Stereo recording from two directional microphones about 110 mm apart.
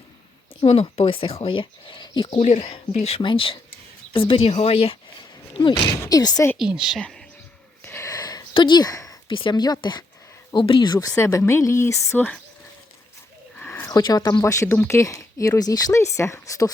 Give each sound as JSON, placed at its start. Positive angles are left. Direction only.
{"t": 0.6, "sound": "speech", "side_deg": 65}
{"t": 2.4, "sound": "speech", "side_deg": 75}
{"t": 3.2, "sound": "speech", "side_deg": 50}
{"t": 5.5, "sound": "speech", "side_deg": 50}
{"t": 6.0, "sound": "speech", "side_deg": 35}
{"t": 6.6, "sound": "speech", "side_deg": -5}
{"t": 7.9, "sound": "a sound", "side_deg": 25}
{"t": 8.5, "sound": "speech", "side_deg": 45}
{"t": 9.3, "sound": "speech", "side_deg": 45}
{"t": 11.2, "sound": "speech", "side_deg": 25}
{"t": 13.6, "sound": "a sound", "side_deg": 20}
{"t": 13.9, "sound": "speech", "side_deg": 40}